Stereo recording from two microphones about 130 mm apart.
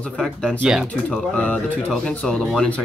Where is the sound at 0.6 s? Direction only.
5° right (ahead or behind).